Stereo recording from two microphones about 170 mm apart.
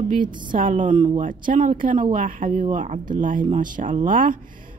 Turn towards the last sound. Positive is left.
turn(degrees=-50)  # may be behind; listen again after turning